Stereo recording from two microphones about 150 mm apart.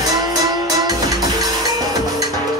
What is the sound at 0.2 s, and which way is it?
Music, 25° right (ahead or behind).